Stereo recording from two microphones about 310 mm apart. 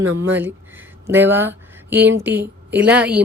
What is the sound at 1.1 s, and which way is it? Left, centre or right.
Speech, centre.